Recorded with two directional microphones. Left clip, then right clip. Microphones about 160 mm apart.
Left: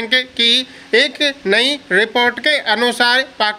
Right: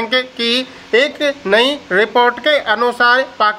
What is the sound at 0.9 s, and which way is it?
Speech, 45° left (ahead or behind).